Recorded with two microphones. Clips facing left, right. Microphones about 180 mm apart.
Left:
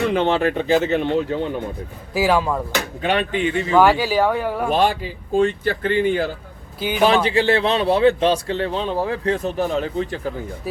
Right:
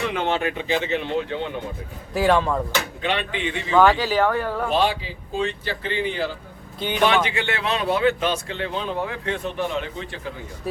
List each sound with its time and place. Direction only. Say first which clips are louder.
0.1 s a man's voice: left 5 dB; 35° left (ahead or behind)
2.1 s speech: left 1 dB; 5° left (ahead or behind)
2.7 s speech: left 4 dB; 45° left (ahead or behind)
3.7 s speech: left 1 dB; 10° left (ahead or behind)
4.7 s speech: left 3 dB; 50° left (ahead or behind)
6.7 s speech: left 3 dB; 5° left (ahead or behind)
7.0 s a man's voice: left 5 dB; 35° left (ahead or behind)